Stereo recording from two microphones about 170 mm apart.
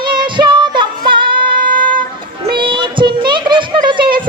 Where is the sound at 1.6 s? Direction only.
55° right (ahead or behind).